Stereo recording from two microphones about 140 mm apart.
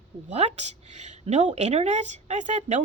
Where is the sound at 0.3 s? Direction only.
55° right (ahead or behind).